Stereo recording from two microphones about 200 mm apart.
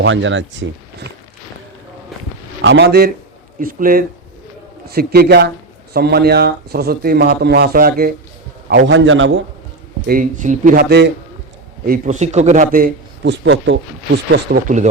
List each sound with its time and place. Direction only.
0.0 s speech: 70° right (ahead or behind)
2.6 s a man's voice: 60° right (ahead or behind)
3.6 s a man's voice: 45° right (ahead or behind)
8.9 s speech: 70° right (ahead or behind)
10.1 s a man's voice: 40° right (ahead or behind)
11.9 s a man's voice: 35° right (ahead or behind); by 14.6 s 55° right (ahead or behind)